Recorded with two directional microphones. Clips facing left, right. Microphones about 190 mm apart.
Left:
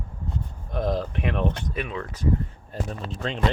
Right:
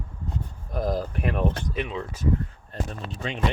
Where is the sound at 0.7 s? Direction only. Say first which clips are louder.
Left 1 dB; 5° right (ahead or behind).